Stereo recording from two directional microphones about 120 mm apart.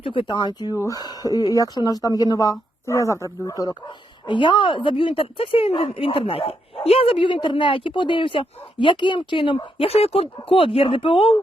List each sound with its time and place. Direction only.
0.0 s speech: 45° left (ahead or behind)
0.7 s speech: 25° left (ahead or behind); by 9.6 s 45° left (ahead or behind)
9.7 s speech: 55° left (ahead or behind)